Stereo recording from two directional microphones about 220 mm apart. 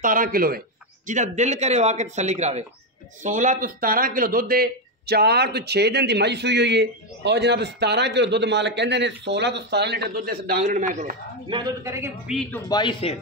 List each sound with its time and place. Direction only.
0.0 s speech: 40° right (ahead or behind)
11.4 s a man's voice: 15° right (ahead or behind)
12.3 s speech: 5° left (ahead or behind); by 13.1 s 20° left (ahead or behind)